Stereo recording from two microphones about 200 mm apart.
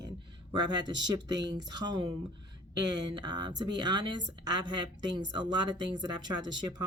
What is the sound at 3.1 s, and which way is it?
Speech, 20° right (ahead or behind).